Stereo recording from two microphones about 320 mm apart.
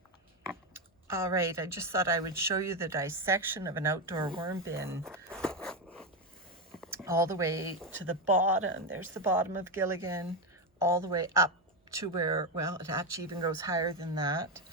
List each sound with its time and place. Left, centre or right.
1.0 s a woman's voice: centre
5.0 s a sound: centre
6.9 s speech: centre
7.9 s speech: right
9.1 s a woman's voice: centre